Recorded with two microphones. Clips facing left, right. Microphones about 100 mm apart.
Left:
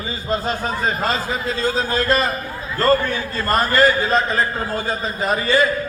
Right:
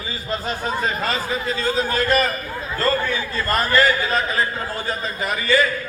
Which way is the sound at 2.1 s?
30° left (ahead or behind).